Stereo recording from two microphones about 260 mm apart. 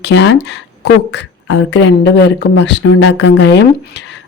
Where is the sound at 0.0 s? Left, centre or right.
Left.